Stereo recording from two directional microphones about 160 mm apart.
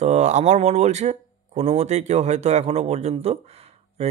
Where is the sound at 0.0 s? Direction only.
45° right (ahead or behind).